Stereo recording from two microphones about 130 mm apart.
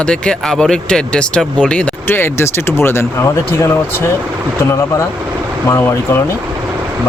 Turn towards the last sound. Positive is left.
turn(degrees=20)  # may be behind; listen again after turning